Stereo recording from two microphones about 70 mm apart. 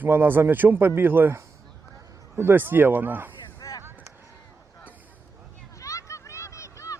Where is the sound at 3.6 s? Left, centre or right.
Left.